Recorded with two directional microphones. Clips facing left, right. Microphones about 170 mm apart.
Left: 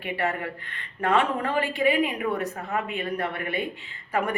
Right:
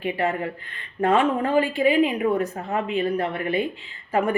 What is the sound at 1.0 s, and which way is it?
A woman's voice, 30° right (ahead or behind).